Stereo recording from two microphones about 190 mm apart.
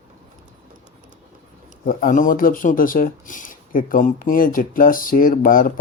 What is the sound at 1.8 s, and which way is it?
Speech, 45° left (ahead or behind).